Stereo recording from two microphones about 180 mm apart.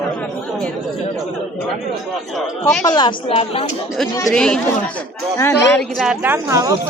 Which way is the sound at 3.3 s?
35° left (ahead or behind).